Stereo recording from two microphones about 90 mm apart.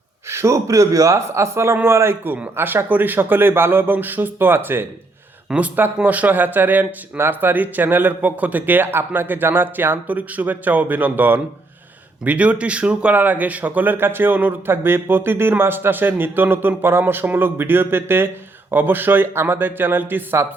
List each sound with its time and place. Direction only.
0.3 s speech: 30° right (ahead or behind)
5.5 s speech: 15° right (ahead or behind)